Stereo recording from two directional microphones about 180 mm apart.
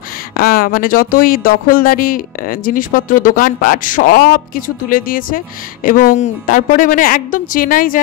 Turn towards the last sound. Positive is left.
turn(degrees=50)  # may be behind; listen again after turning